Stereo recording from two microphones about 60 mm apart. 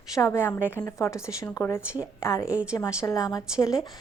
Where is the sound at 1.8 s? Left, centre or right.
Right.